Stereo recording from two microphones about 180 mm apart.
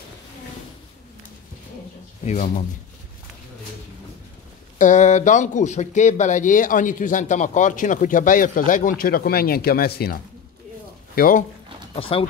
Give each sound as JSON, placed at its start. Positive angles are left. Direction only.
{"t": 2.2, "sound": "speech", "side_deg": 45}
{"t": 4.7, "sound": "speech", "side_deg": 45}
{"t": 11.1, "sound": "speech", "side_deg": 50}
{"t": 11.9, "sound": "speech", "side_deg": 30}